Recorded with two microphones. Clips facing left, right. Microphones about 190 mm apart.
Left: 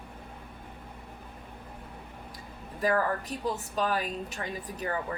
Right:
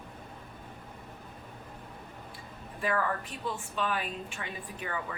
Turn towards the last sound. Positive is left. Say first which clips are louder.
# left 5 dB
turn(degrees=40)  # may be behind; listen again after turning